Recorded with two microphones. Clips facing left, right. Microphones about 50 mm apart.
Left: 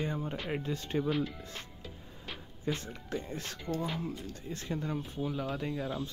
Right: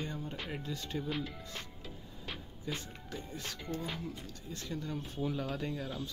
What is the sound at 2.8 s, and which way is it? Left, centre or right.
Speech, left.